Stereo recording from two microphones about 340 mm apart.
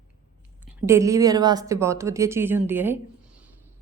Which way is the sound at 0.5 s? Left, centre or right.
Centre.